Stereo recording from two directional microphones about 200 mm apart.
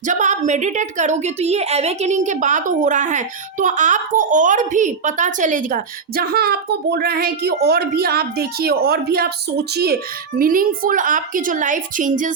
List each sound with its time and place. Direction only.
0.0 s a woman's voice: 40° right (ahead or behind)